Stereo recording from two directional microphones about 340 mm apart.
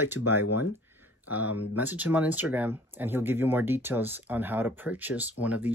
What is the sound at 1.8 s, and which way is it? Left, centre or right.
Speech, centre.